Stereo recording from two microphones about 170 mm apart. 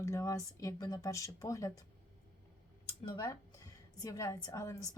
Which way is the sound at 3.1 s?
20° left (ahead or behind).